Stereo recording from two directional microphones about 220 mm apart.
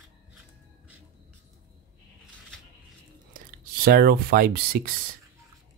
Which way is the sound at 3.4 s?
40° right (ahead or behind).